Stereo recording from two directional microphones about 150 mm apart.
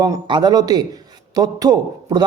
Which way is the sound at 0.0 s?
25° right (ahead or behind).